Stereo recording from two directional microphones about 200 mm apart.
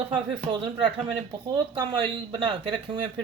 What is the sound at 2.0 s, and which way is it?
Speech, 25° right (ahead or behind).